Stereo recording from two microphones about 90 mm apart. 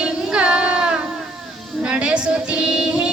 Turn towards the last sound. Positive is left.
turn(degrees=-10)  # may be behind; listen again after turning